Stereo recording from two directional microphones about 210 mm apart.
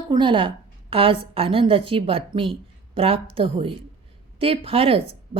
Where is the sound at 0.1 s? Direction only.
25° right (ahead or behind).